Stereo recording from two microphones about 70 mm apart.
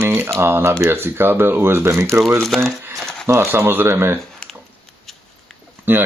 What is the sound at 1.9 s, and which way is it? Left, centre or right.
Speech, right.